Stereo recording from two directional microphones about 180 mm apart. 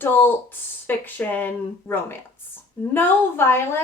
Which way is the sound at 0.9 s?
10° left (ahead or behind).